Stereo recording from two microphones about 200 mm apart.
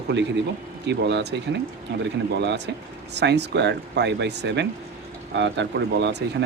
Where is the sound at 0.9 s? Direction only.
60° right (ahead or behind).